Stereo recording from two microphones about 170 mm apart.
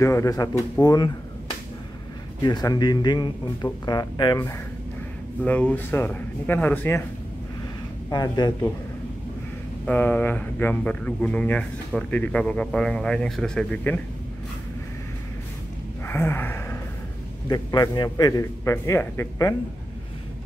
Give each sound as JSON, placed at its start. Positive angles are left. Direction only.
{"t": 0.0, "sound": "a man's voice", "side_deg": 20}
{"t": 2.4, "sound": "a man's voice", "side_deg": 25}
{"t": 5.4, "sound": "speech", "side_deg": 10}
{"t": 8.1, "sound": "a man's voice", "side_deg": 25}
{"t": 9.8, "sound": "speech", "side_deg": 10}
{"t": 16.1, "sound": "a sound", "side_deg": 15}
{"t": 17.5, "sound": "a man's voice", "side_deg": 25}